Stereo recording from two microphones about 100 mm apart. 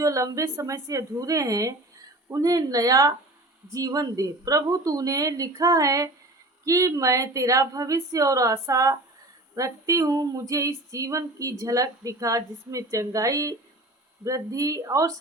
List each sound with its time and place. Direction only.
0.0 s female singing: 35° right (ahead or behind)